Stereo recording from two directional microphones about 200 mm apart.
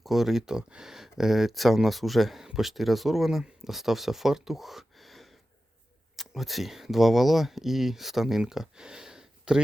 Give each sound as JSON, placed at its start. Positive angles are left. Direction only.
{"t": 0.0, "sound": "speech", "side_deg": 0}